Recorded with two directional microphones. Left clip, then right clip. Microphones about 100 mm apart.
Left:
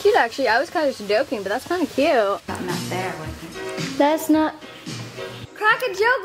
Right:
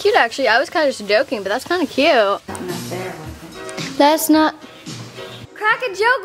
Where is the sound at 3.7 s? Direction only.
25° right (ahead or behind).